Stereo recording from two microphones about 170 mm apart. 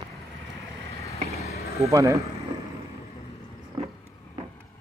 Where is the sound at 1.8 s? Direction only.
20° right (ahead or behind).